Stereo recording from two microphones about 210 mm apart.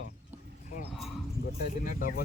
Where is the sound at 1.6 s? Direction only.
40° left (ahead or behind).